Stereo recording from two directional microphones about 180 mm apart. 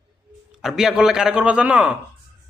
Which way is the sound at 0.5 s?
Centre (ahead or behind).